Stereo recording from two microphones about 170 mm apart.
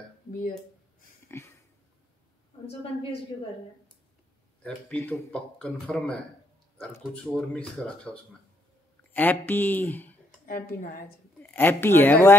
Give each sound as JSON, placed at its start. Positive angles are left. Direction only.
{"t": 1.3, "sound": "speech", "side_deg": 15}
{"t": 2.6, "sound": "a woman's voice", "side_deg": 35}
{"t": 4.6, "sound": "speech", "side_deg": 10}
{"t": 10.4, "sound": "speech", "side_deg": 55}
{"t": 11.5, "sound": "speech", "side_deg": 10}